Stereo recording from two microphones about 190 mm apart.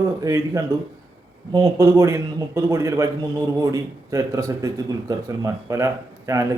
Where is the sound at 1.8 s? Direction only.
15° right (ahead or behind).